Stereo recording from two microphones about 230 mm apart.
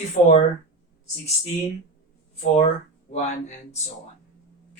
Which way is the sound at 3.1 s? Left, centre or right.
Left.